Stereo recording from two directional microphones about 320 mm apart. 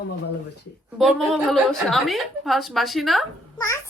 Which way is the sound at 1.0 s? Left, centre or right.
Centre.